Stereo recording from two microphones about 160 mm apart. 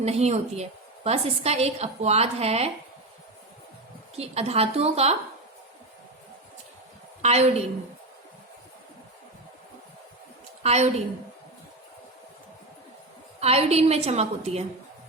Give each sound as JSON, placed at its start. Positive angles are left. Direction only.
{"t": 0.0, "sound": "a woman's voice", "side_deg": -40}
{"t": 4.1, "sound": "a woman's voice", "side_deg": -40}
{"t": 7.2, "sound": "a woman's voice", "side_deg": -40}
{"t": 10.6, "sound": "a woman's voice", "side_deg": -40}
{"t": 13.4, "sound": "a woman's voice", "side_deg": -40}